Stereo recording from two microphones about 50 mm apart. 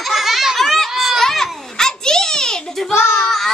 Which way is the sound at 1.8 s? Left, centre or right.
Centre.